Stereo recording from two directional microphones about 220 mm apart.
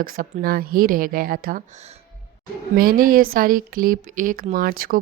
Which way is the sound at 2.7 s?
40° right (ahead or behind).